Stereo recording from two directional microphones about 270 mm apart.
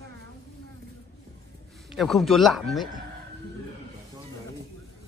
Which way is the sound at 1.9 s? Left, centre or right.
Centre.